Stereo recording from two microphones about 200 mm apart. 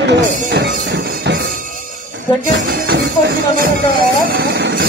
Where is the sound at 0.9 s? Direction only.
60° right (ahead or behind).